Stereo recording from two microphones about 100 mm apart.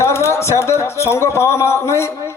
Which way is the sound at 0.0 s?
25° left (ahead or behind).